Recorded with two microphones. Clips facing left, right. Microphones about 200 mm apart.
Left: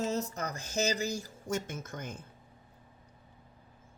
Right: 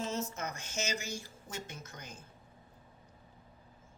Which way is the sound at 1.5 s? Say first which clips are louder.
Left 10 dB; 50° left (ahead or behind).